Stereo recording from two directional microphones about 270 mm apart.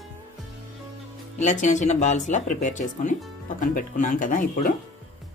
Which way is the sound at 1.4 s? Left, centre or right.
Left.